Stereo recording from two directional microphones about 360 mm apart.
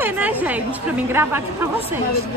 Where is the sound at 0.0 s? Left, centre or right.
Centre.